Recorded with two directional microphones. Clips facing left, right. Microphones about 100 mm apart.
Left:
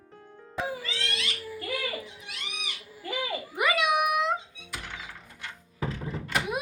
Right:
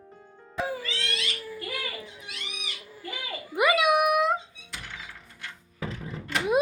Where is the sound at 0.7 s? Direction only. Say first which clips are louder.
Right 2 dB; 15° left (ahead or behind).